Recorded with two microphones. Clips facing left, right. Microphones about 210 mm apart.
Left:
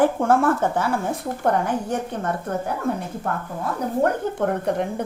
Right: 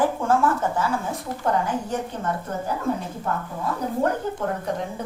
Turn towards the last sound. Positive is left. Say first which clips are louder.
# left 4 dB
turn(degrees=60)  # may be behind; listen again after turning